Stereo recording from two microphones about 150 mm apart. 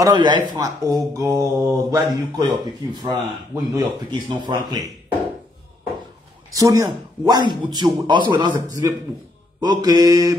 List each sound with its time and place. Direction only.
0.0 s speech: 30° right (ahead or behind)
6.5 s speech: 20° right (ahead or behind)
8.5 s speech: 20° right (ahead or behind)